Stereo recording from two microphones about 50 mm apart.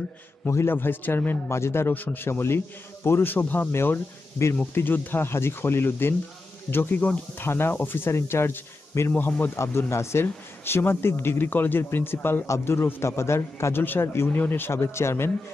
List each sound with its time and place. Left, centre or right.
0.7 s a man's voice: left
1.5 s a man's voice: left
2.0 s a man's voice: left
8.1 s speech: left
9.1 s speech: left
9.6 s a man's voice: left
10.2 s a man's voice: left
12.4 s a man's voice: left
14.3 s a man's voice: left
14.8 s a man's voice: left